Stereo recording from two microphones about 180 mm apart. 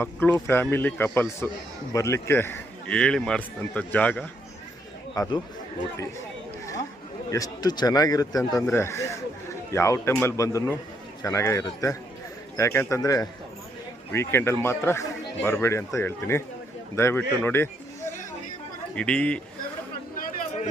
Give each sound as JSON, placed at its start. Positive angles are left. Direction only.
{"t": 0.0, "sound": "a man's voice", "side_deg": 10}
{"t": 5.1, "sound": "speech", "side_deg": 20}
{"t": 7.3, "sound": "a man's voice", "side_deg": 20}
{"t": 20.1, "sound": "a sound", "side_deg": 45}